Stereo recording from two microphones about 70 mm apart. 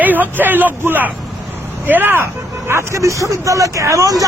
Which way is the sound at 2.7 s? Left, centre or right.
Right.